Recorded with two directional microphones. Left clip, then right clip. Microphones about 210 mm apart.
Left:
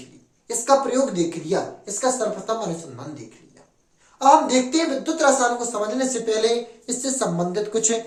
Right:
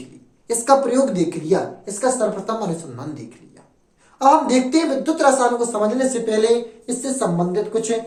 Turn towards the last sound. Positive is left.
turn(degrees=15)  # may be behind; listen again after turning